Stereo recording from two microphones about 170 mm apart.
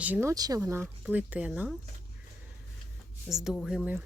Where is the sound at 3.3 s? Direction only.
Centre (ahead or behind).